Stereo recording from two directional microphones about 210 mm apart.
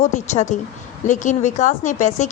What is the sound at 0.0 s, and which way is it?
A woman's voice, 35° left (ahead or behind).